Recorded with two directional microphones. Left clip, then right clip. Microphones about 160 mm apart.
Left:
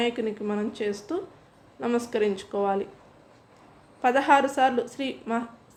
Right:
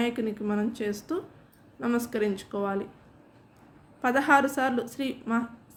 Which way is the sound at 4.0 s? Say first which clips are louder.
Left 2 dB; 20° right (ahead or behind).